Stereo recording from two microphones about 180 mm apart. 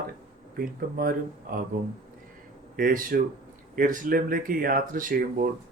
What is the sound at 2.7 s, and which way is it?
Speech, 50° right (ahead or behind).